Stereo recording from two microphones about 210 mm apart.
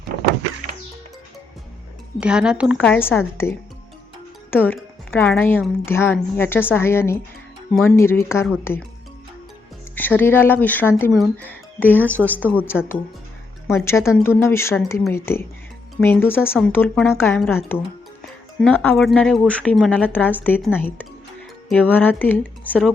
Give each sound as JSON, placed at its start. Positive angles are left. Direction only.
{"t": 0.1, "sound": "a sound", "side_deg": -45}
{"t": 2.1, "sound": "speech", "side_deg": -5}
{"t": 2.8, "sound": "a woman's voice", "side_deg": 10}
{"t": 4.5, "sound": "a woman's voice", "side_deg": 10}
{"t": 9.9, "sound": "a woman's voice", "side_deg": 10}
{"t": 18.6, "sound": "a woman's voice", "side_deg": 10}